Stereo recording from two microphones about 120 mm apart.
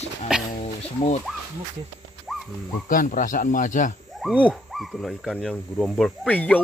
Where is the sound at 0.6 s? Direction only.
60° left (ahead or behind).